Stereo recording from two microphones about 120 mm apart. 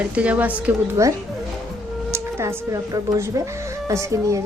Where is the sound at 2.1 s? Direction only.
25° right (ahead or behind).